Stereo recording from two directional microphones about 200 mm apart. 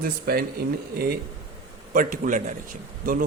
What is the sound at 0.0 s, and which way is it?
A man's voice, 50° right (ahead or behind).